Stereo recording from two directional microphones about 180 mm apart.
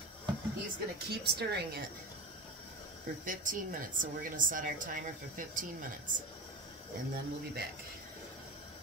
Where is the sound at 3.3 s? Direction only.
45° right (ahead or behind).